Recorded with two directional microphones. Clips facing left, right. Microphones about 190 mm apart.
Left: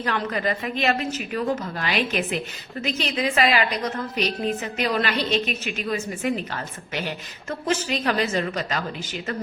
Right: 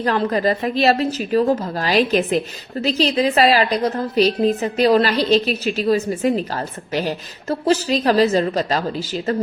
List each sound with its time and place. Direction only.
0.0 s a woman's voice: 35° right (ahead or behind)